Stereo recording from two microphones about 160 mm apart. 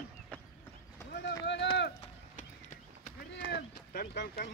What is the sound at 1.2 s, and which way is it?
Speech, 90° left.